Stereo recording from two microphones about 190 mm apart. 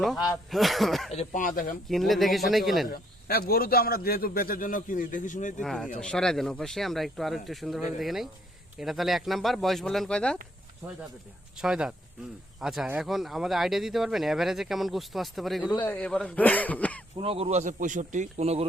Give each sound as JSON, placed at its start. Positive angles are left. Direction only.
{"t": 0.5, "sound": "speech", "side_deg": 0}
{"t": 1.1, "sound": "a man's voice", "side_deg": 40}
{"t": 1.9, "sound": "speech", "side_deg": 0}
{"t": 2.9, "sound": "a man's voice", "side_deg": 50}
{"t": 5.6, "sound": "speech", "side_deg": 0}
{"t": 11.5, "sound": "speech", "side_deg": -5}
{"t": 17.2, "sound": "speech", "side_deg": -30}